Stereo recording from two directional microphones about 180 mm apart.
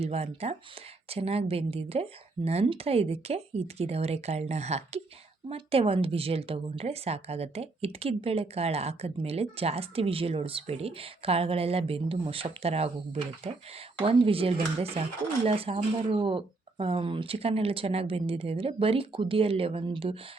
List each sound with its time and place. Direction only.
0.0 s speech: 35° right (ahead or behind)
14.0 s speech: 30° right (ahead or behind)